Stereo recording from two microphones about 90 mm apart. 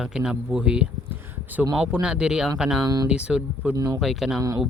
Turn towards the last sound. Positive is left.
turn(degrees=-40)  # may be behind; listen again after turning